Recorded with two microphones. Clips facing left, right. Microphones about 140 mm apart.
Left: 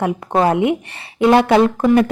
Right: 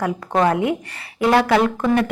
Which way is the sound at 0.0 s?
25° left (ahead or behind).